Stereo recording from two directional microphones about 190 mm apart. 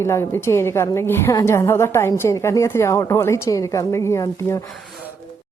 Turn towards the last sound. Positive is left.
turn(degrees=15)  # may be behind; listen again after turning